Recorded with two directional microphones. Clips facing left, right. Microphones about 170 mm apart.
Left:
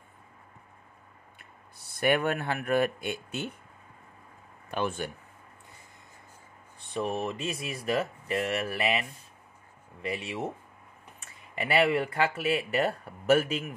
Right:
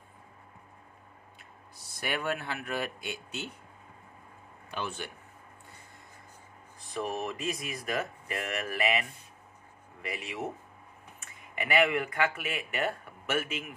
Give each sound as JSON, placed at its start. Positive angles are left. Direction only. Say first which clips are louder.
{"t": 1.4, "sound": "speech", "louder": "right 1 dB", "side_deg": 55}
{"t": 4.6, "sound": "speech", "louder": "left 6 dB", "side_deg": 50}
{"t": 6.9, "sound": "speech", "louder": "left 3 dB", "side_deg": 25}
{"t": 10.0, "sound": "speech", "louder": "left 3 dB", "side_deg": 30}